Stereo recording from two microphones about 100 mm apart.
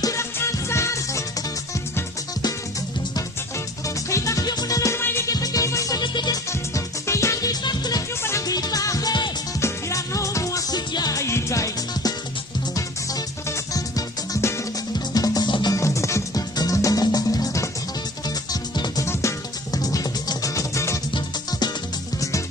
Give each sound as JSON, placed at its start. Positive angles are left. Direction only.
{"t": 0.0, "sound": "music", "side_deg": 30}
{"t": 3.8, "sound": "music", "side_deg": 30}
{"t": 4.9, "sound": "music", "side_deg": 25}
{"t": 5.3, "sound": "music", "side_deg": 35}
{"t": 6.5, "sound": "music", "side_deg": 30}
{"t": 7.6, "sound": "music", "side_deg": 45}
{"t": 8.2, "sound": "music", "side_deg": 30}
{"t": 9.6, "sound": "music", "side_deg": 30}
{"t": 15.7, "sound": "music", "side_deg": 30}